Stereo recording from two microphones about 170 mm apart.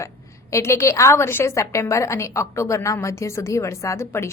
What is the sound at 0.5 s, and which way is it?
A woman's voice, 15° left (ahead or behind).